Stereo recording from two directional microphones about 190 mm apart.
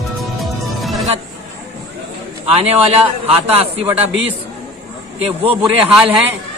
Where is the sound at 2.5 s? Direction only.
30° right (ahead or behind).